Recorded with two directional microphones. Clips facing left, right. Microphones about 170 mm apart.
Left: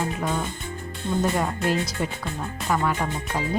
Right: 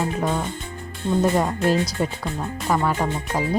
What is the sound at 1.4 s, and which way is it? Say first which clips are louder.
Music: right 4 dB; 35° right (ahead or behind).